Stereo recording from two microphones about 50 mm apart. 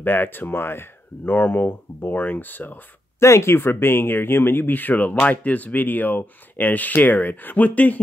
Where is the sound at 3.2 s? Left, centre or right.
Left.